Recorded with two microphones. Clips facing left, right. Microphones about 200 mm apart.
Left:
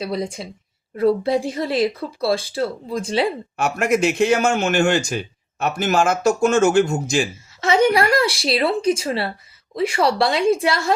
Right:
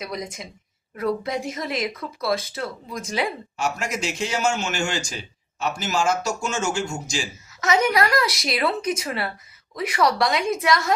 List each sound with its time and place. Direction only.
0.0 s speech: 30° left (ahead or behind)
3.6 s a man's voice: 55° left (ahead or behind)
7.6 s speech: 30° left (ahead or behind)